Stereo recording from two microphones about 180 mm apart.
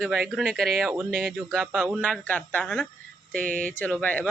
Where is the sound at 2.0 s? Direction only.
5° left (ahead or behind).